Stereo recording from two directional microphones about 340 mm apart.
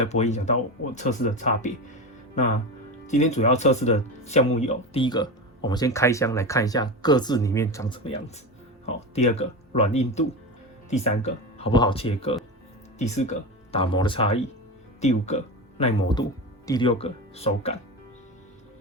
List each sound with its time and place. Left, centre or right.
0.0 s speech: centre
3.1 s speech: left